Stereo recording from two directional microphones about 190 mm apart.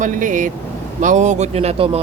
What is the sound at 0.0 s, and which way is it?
Speech, 45° right (ahead or behind).